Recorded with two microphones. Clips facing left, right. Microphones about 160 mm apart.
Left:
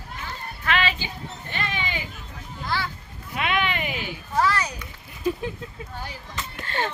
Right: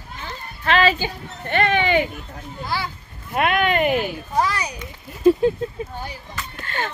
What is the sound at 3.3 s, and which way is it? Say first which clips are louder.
Speech: right 6 dB; 50° right (ahead or behind).